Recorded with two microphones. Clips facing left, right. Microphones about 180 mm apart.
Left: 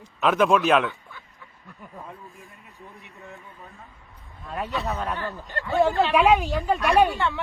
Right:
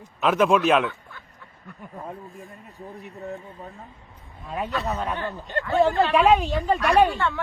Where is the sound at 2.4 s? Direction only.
35° right (ahead or behind).